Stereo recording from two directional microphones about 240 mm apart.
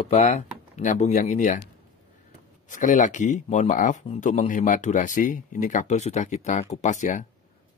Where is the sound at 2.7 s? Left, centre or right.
Left.